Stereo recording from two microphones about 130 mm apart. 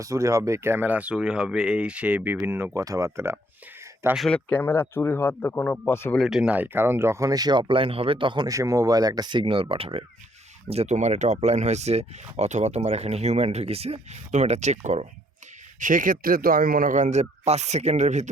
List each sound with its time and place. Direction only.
0.0 s speech: 25° right (ahead or behind)
4.1 s a man's voice: 5° left (ahead or behind)
6.1 s speech: 5° right (ahead or behind); by 8.4 s 40° right (ahead or behind)
8.4 s speech: 25° right (ahead or behind); by 10.0 s 45° right (ahead or behind)
10.7 s speech: 60° right (ahead or behind)
15.8 s speech: 90° right; by 18.3 s 65° right (ahead or behind)